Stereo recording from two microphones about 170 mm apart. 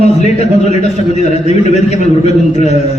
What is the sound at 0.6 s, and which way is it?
A man's voice, 40° left (ahead or behind).